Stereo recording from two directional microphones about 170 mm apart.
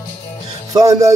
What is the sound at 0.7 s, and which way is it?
Speech, 20° right (ahead or behind).